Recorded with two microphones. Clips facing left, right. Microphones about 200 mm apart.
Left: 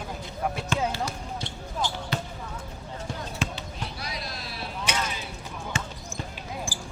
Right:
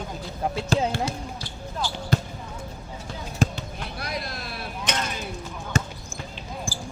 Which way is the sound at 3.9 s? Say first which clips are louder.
Right 4 dB; 55° right (ahead or behind).